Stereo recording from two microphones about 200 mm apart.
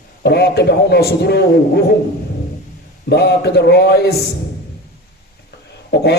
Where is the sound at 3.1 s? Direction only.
55° left (ahead or behind).